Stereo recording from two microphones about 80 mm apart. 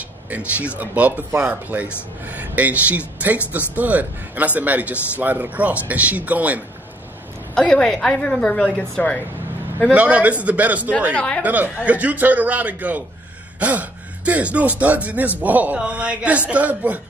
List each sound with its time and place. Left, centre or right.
0.3 s a man's voice: centre
7.5 s a woman's voice: centre
9.9 s a man's voice: centre
11.1 s a woman's voice: centre
11.4 s a man's voice: centre